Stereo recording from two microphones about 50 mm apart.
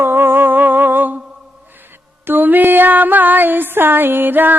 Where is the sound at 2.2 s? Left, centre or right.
Right.